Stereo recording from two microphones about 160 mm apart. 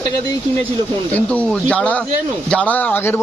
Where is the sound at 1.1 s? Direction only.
10° left (ahead or behind).